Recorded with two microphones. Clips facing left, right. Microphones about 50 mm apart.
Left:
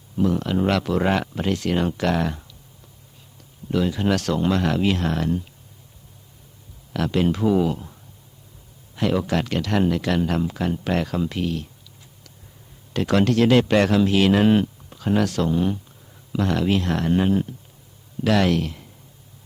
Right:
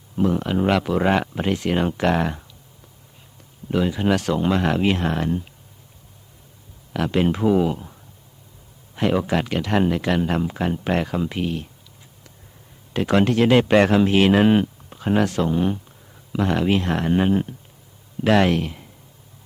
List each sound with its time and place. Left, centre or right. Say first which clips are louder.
0.2 s speech: right 1 dB; right
3.7 s speech: right 1 dB; centre
6.9 s speech: right 1 dB; centre
9.0 s speech: right 1 dB; right
12.9 s speech: right 1 dB; centre
14.3 s speech: right 1 dB; centre